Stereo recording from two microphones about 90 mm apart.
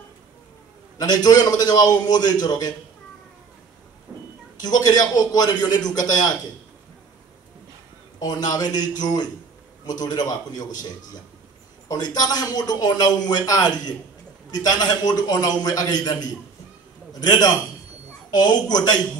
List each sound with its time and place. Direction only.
0.9 s a man's voice: 45° left (ahead or behind)
4.1 s a sound: 25° right (ahead or behind)
4.6 s a man's voice: 45° left (ahead or behind)
8.2 s a man's voice: 45° left (ahead or behind)